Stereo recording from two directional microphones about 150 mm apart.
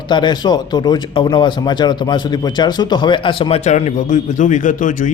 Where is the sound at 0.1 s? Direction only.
30° left (ahead or behind).